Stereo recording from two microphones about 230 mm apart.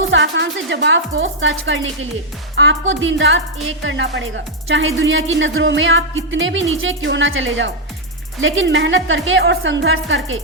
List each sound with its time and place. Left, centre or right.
0.1 s a woman's voice: right